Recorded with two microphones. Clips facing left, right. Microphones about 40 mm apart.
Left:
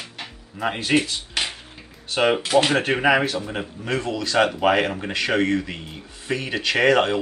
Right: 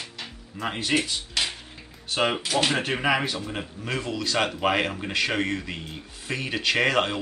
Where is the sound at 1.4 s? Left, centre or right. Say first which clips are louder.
Left 2 dB; left.